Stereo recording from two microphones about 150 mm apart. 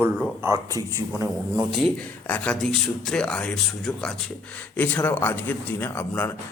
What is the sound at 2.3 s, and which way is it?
A man's voice, 5° left (ahead or behind).